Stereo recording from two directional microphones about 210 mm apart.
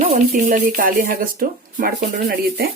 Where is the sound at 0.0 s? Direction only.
35° right (ahead or behind).